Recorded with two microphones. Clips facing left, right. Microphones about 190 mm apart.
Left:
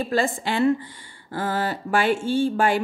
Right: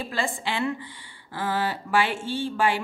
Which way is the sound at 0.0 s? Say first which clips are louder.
Left 6 dB; 45° left (ahead or behind).